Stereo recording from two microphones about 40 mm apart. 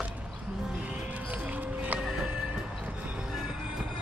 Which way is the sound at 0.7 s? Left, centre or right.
Right.